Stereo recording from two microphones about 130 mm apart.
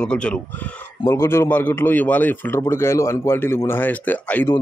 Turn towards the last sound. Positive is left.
turn(degrees=15)  # may be behind; listen again after turning